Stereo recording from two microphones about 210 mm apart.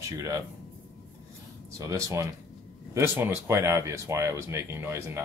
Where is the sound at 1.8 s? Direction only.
15° right (ahead or behind).